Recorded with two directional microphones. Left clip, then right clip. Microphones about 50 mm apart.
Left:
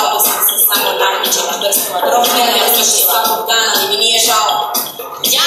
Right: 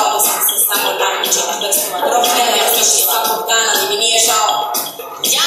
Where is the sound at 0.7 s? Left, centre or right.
Centre.